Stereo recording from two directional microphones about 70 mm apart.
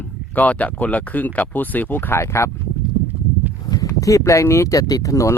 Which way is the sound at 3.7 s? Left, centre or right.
Left.